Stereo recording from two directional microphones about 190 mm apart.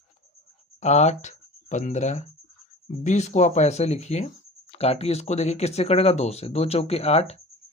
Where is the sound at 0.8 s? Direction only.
35° left (ahead or behind).